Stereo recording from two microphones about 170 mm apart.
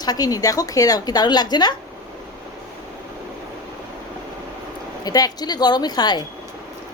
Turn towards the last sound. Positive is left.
turn(degrees=25)  # may be behind; listen again after turning